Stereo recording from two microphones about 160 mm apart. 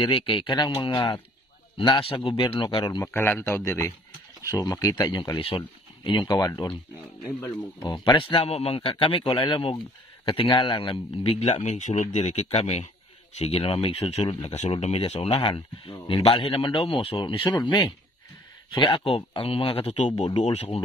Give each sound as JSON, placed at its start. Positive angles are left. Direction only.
{"t": 0.0, "sound": "speech", "side_deg": 30}
{"t": 3.1, "sound": "speech", "side_deg": 15}
{"t": 8.0, "sound": "speech", "side_deg": 35}